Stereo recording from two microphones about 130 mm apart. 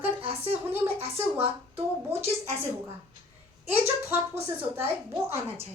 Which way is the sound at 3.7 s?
15° right (ahead or behind).